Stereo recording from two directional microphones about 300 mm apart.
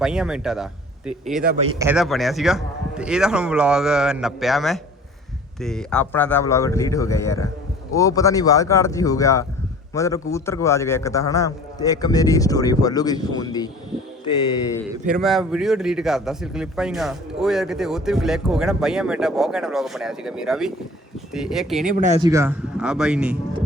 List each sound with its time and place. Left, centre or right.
0.0 s a man's voice: centre
15.0 s speech: centre
22.0 s speech: right
22.3 s speech: centre